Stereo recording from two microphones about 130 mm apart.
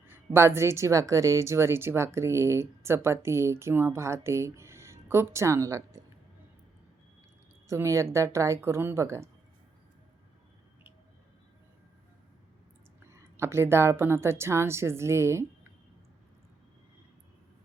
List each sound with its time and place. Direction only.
0.0 s speech: 20° right (ahead or behind)
7.7 s speech: 20° right (ahead or behind)
13.1 s speech: 20° right (ahead or behind)